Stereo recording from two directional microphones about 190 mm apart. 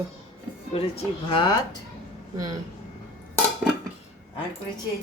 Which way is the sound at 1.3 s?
25° left (ahead or behind).